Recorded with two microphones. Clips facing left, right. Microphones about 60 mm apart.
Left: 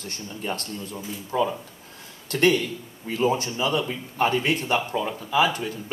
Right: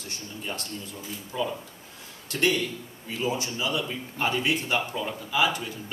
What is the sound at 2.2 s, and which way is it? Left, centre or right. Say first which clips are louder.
Speech: left 5 dB; left.